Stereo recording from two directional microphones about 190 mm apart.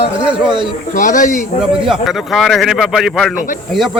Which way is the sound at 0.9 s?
45° left (ahead or behind).